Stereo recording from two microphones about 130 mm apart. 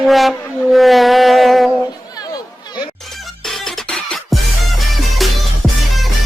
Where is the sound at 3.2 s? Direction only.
Centre (ahead or behind).